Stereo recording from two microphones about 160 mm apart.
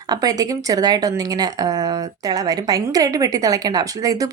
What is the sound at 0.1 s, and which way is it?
A woman's voice, 25° right (ahead or behind).